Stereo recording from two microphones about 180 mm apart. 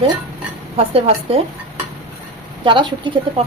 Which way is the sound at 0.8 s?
35° right (ahead or behind).